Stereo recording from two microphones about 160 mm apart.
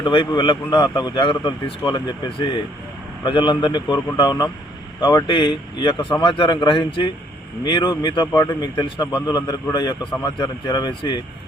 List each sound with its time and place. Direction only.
0.0 s a man's voice: 30° left (ahead or behind)